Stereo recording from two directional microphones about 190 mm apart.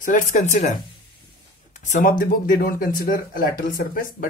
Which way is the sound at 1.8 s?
40° left (ahead or behind).